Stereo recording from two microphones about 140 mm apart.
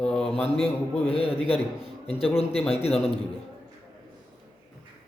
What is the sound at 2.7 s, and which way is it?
Speech, 45° left (ahead or behind).